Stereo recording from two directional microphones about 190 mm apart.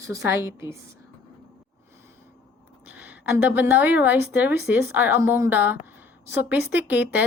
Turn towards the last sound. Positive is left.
turn(degrees=-10)  # may be behind; listen again after turning